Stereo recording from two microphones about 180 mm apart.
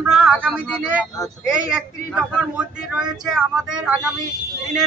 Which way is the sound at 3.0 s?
5° right (ahead or behind).